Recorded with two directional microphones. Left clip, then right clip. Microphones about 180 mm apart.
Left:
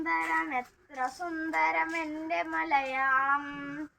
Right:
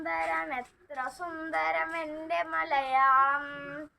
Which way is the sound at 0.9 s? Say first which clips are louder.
Left 2 dB; 20° right (ahead or behind).